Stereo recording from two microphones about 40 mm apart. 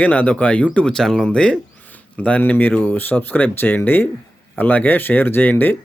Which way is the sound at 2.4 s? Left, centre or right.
Left.